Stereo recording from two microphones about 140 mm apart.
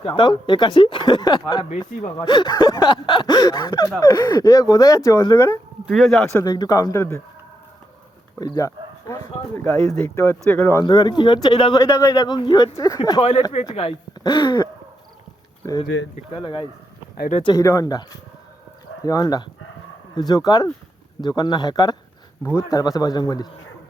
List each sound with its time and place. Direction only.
0.1 s speech: 35° left (ahead or behind)
5.9 s speech: centre (ahead or behind)
6.4 s speech: 25° left (ahead or behind)
8.4 s speech: 25° left (ahead or behind)
10.8 s speech: 30° left (ahead or behind)
17.4 s speech: 25° left (ahead or behind)